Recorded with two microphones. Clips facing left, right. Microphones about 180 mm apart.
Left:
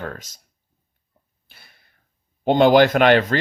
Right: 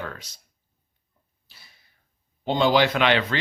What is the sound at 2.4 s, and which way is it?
Speech, 55° left (ahead or behind).